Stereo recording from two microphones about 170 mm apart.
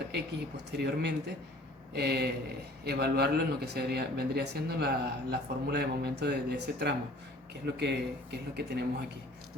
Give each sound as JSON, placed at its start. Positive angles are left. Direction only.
{"t": 0.1, "sound": "a man's voice", "side_deg": -80}